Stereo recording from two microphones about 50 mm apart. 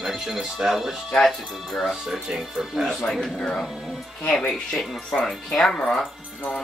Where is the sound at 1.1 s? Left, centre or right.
Centre.